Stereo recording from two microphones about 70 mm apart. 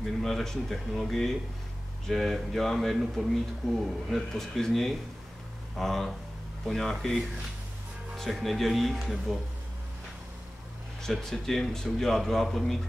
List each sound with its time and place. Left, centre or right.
0.0 s speech: centre
11.0 s speech: centre